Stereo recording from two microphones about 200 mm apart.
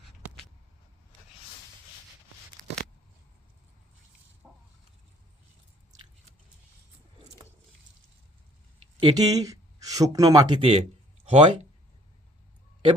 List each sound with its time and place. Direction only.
4.4 s chicken: 5° left (ahead or behind)
9.0 s speech: 20° right (ahead or behind)